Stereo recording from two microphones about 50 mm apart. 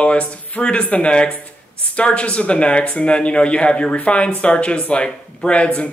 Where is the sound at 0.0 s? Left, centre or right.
Left.